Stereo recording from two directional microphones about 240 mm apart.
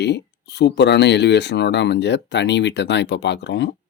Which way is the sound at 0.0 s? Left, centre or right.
Left.